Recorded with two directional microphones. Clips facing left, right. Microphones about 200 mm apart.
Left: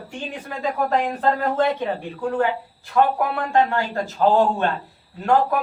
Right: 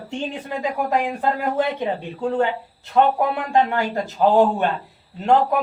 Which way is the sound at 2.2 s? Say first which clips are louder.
Right 1 dB; 25° right (ahead or behind).